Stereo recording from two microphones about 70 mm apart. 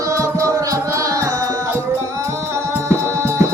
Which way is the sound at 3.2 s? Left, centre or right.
Right.